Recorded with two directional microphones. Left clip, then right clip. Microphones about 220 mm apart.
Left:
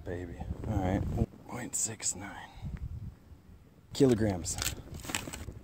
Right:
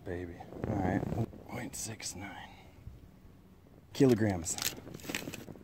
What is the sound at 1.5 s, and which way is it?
Speech, 10° left (ahead or behind).